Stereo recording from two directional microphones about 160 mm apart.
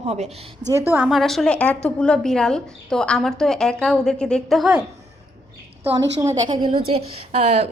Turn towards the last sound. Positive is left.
turn(degrees=-40)  # may be behind; listen again after turning